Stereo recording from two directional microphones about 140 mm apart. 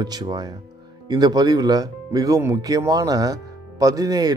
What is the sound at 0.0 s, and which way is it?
Speech, 30° right (ahead or behind).